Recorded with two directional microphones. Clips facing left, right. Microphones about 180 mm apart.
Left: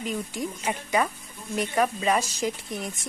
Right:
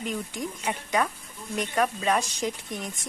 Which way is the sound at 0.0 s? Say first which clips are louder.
Left 1 dB; centre (ahead or behind).